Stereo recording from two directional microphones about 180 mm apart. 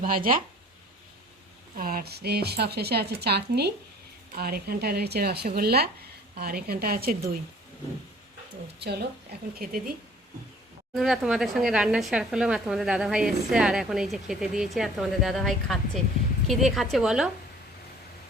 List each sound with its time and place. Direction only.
0.0 s speech: 50° right (ahead or behind)
1.7 s speech: 55° right (ahead or behind)
8.8 s speech: 65° right (ahead or behind)
9.6 s speech: 55° right (ahead or behind)
10.9 s speech: centre (ahead or behind)